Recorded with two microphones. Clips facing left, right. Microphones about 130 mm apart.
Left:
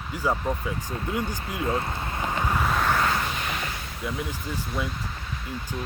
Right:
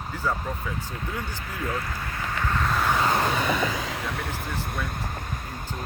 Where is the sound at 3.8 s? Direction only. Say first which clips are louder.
Right 1 dB; 90° right; by 5.2 s 50° right (ahead or behind).